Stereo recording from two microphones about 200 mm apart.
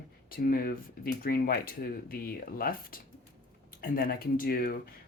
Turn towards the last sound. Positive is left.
turn(degrees=45)  # may be behind; listen again after turning